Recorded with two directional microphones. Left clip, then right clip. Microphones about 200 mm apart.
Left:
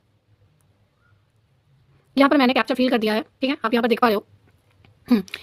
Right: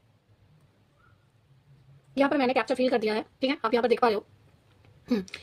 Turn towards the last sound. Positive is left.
turn(degrees=35)  # may be behind; listen again after turning